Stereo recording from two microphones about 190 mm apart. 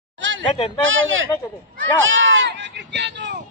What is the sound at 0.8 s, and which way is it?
Speech, 90° right.